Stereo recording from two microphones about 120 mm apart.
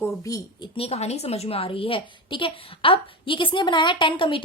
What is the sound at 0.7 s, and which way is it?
A woman's voice, 60° left (ahead or behind).